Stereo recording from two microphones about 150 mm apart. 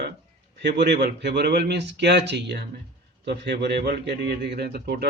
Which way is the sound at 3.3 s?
90° right.